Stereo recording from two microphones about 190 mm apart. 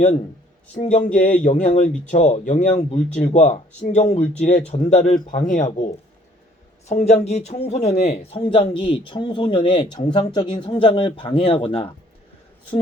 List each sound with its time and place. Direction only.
0.8 s speech: 40° left (ahead or behind)